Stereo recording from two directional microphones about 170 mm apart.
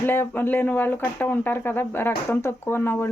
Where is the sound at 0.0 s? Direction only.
10° left (ahead or behind).